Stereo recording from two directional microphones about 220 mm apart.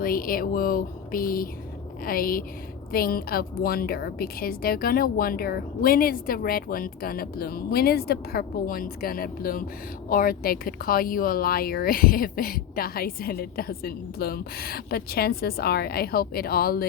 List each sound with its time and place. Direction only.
0.0 s a woman's voice: 40° left (ahead or behind)